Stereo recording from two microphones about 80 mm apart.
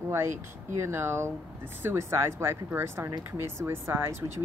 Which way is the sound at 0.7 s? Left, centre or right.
Right.